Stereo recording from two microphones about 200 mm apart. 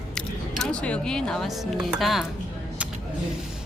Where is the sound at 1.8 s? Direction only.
Centre (ahead or behind).